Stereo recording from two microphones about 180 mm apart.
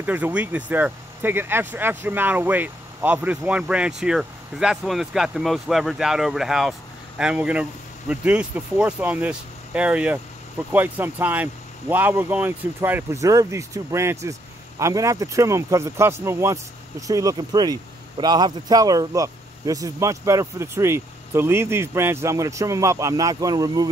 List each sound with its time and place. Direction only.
0.0 s a man's voice: 10° right (ahead or behind)